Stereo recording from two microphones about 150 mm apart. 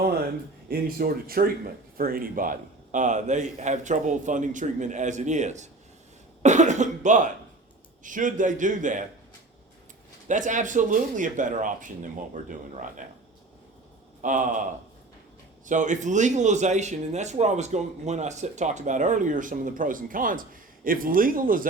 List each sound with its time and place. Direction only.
0.7 s speech: 85° right; by 5.6 s 50° right (ahead or behind)
6.4 s cough: 55° right (ahead or behind)
8.0 s speech: 60° right (ahead or behind)
10.2 s speech: 55° right (ahead or behind)
14.2 s a man's voice: 60° right (ahead or behind)
15.6 s speech: 55° right (ahead or behind)